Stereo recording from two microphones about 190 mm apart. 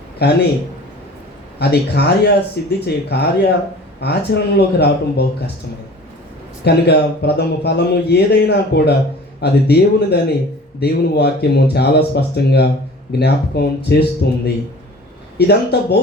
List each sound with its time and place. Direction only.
0.2 s speech: 60° left (ahead or behind)
1.5 s speech: 60° left (ahead or behind)
6.7 s speech: 60° left (ahead or behind)